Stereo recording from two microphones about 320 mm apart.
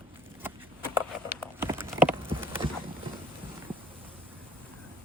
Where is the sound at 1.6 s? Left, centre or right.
Centre.